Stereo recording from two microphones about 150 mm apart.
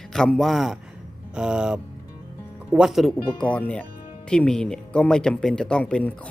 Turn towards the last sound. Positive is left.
turn(degrees=5)  # may be behind; listen again after turning